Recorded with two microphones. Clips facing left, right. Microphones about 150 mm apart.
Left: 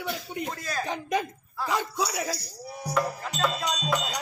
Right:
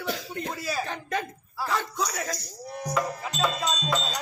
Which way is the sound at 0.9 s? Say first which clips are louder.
Left 3 dB; 15° left (ahead or behind).